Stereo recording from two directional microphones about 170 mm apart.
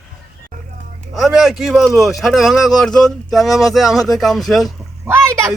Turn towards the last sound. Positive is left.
turn(degrees=-15)  # may be behind; listen again after turning